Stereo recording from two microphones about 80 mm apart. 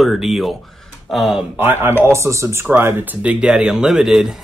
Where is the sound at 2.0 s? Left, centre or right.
Right; by 4.4 s centre.